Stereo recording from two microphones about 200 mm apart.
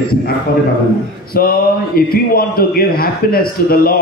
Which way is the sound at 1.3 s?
50° left (ahead or behind).